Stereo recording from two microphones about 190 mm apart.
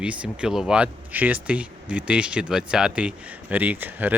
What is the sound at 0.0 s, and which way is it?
Speech, 5° right (ahead or behind).